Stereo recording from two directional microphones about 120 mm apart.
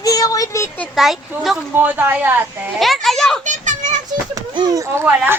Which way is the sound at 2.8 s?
Centre (ahead or behind).